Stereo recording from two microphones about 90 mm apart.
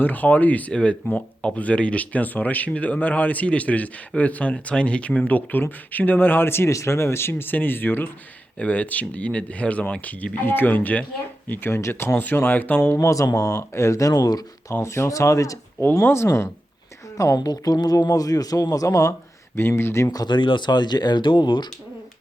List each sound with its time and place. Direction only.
0.0 s speech: 20° left (ahead or behind)
12.9 s speech: 35° left (ahead or behind)
14.8 s speech: 30° left (ahead or behind)
15.8 s speech: 25° left (ahead or behind)
17.3 s speech: 50° left (ahead or behind); by 20.1 s 30° left (ahead or behind)
20.1 s speech: 45° left (ahead or behind)
20.3 s speech: 65° left (ahead or behind)